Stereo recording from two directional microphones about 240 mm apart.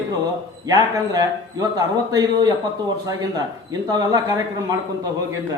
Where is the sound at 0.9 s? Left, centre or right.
Centre.